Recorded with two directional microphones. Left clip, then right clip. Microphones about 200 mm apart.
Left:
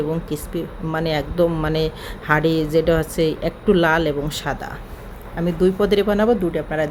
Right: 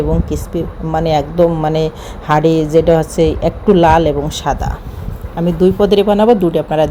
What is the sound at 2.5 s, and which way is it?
Speech, 30° left (ahead or behind).